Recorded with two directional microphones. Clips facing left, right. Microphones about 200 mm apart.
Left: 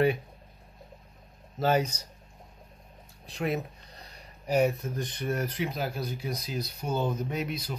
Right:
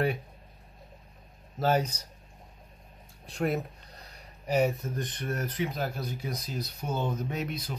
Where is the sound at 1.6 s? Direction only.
5° left (ahead or behind).